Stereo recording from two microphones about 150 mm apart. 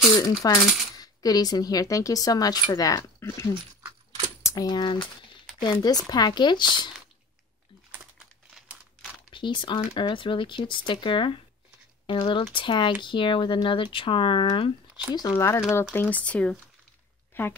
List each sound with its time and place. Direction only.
0.1 s speech: 25° left (ahead or behind)
9.3 s speech: 35° left (ahead or behind)
15.0 s speech: 25° left (ahead or behind); by 16.5 s 10° left (ahead or behind)
17.3 s a sound: 15° left (ahead or behind)